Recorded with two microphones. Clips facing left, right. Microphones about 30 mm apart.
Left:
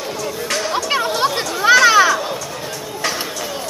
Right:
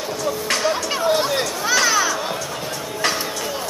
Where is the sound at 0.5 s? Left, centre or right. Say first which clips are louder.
Left 1 dB; centre.